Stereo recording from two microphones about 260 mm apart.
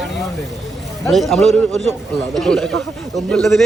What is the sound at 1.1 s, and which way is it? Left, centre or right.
A man's voice, centre.